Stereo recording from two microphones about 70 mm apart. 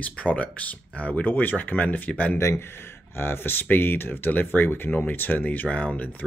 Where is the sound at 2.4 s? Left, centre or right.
Left.